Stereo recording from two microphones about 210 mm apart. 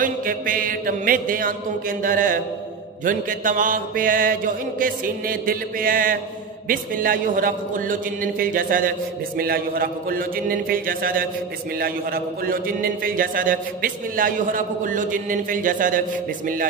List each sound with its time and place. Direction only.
0.0 s a man's voice: 40° right (ahead or behind)